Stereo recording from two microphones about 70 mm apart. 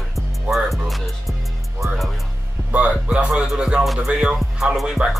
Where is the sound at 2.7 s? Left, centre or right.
Right.